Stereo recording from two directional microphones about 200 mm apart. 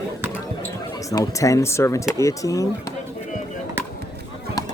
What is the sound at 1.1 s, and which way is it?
Speech, 15° left (ahead or behind).